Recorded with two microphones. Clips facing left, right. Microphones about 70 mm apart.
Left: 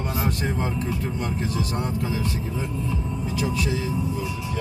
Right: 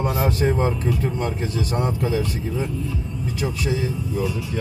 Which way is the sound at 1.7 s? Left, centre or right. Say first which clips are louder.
Right 4 dB; right.